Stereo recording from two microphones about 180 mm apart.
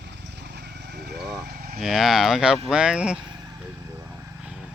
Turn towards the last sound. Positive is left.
turn(degrees=-5)  # may be behind; listen again after turning